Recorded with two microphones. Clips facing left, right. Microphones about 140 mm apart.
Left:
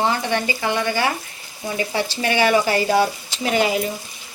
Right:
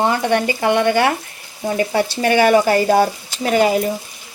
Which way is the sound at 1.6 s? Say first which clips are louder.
Right 5 dB; 45° right (ahead or behind).